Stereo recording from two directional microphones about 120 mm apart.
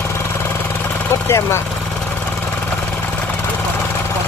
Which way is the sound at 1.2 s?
20° left (ahead or behind).